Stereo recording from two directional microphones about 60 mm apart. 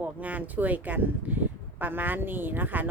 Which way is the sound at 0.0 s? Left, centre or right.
Right.